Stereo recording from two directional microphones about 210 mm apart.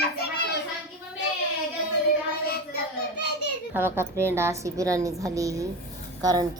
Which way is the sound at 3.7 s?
10° right (ahead or behind).